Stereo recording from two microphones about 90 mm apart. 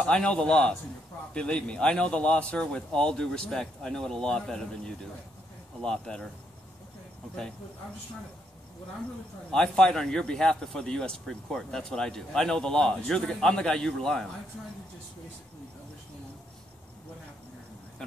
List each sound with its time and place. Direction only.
0.0 s a man's voice: 10° left (ahead or behind)
9.5 s a man's voice: 5° left (ahead or behind)